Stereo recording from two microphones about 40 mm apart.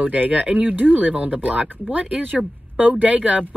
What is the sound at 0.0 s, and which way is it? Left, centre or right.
Speech, right.